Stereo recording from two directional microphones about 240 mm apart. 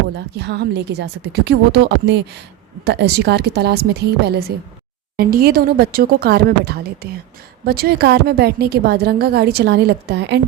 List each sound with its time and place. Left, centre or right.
0.3 s a woman's voice: right